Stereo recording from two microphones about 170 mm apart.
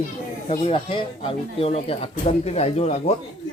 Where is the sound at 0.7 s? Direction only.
30° left (ahead or behind).